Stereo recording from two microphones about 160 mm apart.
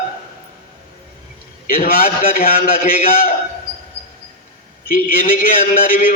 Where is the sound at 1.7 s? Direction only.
65° left (ahead or behind).